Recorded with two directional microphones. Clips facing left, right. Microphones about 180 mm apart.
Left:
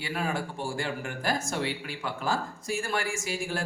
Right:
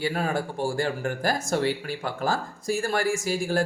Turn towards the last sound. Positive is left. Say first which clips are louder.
# right 7 dB
turn(degrees=-40)  # may be behind; listen again after turning